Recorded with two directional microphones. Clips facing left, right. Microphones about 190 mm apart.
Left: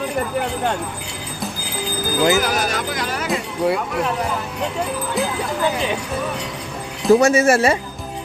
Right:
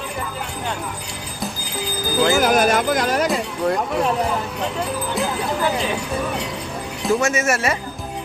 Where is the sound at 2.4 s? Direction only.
50° right (ahead or behind).